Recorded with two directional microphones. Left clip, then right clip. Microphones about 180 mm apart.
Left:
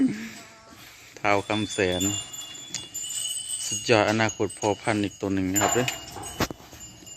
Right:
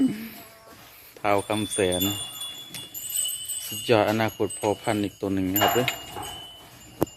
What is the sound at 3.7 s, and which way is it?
Speech, centre (ahead or behind).